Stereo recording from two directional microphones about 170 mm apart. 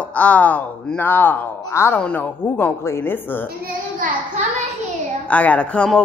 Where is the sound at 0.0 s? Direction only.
10° left (ahead or behind).